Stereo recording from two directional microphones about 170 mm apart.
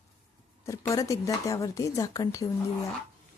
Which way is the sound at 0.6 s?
20° left (ahead or behind).